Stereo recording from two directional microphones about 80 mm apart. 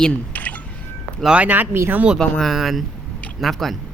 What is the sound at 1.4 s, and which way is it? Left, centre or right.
Speech, right.